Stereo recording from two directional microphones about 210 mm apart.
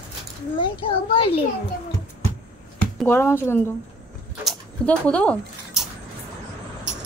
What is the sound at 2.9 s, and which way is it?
Speech, 10° left (ahead or behind).